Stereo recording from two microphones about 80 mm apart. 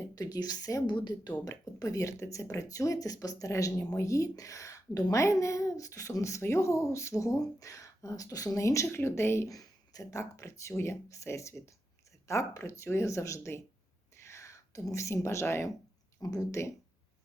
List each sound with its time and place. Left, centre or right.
0.2 s speech: left
0.9 s speech: left
1.5 s speech: left
9.5 s speech: left